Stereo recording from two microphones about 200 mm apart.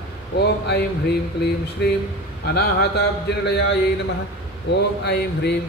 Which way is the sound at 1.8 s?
55° left (ahead or behind).